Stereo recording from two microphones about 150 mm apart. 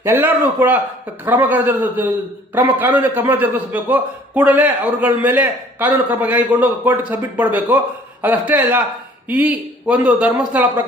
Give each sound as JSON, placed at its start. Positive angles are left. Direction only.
{"t": 0.0, "sound": "a man's voice", "side_deg": -15}